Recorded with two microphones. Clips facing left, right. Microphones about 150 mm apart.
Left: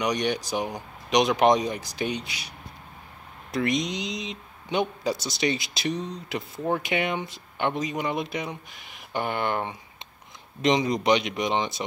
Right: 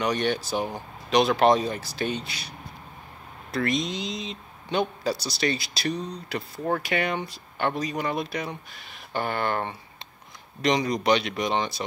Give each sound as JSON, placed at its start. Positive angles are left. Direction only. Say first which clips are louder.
{"t": 0.0, "sound": "speech", "louder": "right 1 dB", "side_deg": 15}
{"t": 3.5, "sound": "speech", "louder": "left 1 dB", "side_deg": 20}